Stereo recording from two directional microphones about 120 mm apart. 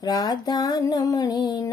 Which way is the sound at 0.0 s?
35° left (ahead or behind).